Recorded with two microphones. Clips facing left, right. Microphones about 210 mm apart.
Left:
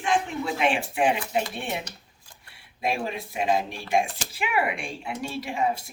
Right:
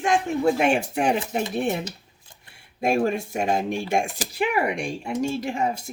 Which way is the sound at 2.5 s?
45° right (ahead or behind).